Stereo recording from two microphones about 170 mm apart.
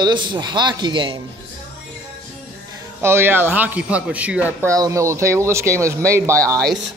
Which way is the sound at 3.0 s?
15° right (ahead or behind).